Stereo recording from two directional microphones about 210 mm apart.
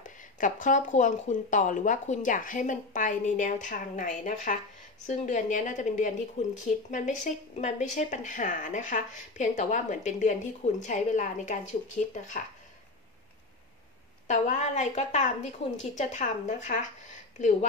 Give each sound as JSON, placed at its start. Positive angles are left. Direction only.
{"t": 0.0, "sound": "speech", "side_deg": 40}
{"t": 14.2, "sound": "speech", "side_deg": 35}